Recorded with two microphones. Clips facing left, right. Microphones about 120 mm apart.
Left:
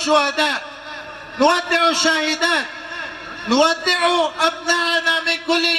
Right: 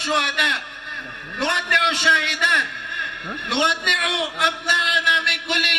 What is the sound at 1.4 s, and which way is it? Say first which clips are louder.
A man's voice: left 7 dB; 30° left (ahead or behind).